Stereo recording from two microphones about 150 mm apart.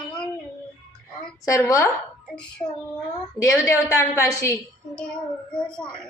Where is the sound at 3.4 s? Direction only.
20° left (ahead or behind).